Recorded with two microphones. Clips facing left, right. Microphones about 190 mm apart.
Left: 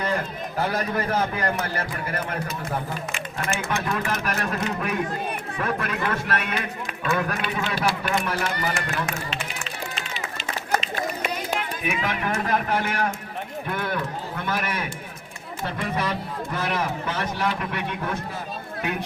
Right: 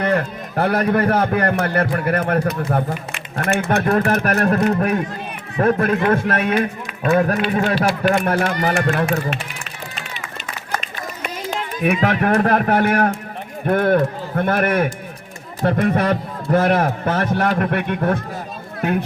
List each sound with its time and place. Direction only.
0.0 s a man's voice: 60° right (ahead or behind)
12.0 s speech: 60° right (ahead or behind)